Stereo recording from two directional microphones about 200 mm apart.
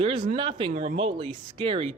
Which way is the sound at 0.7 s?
35° right (ahead or behind).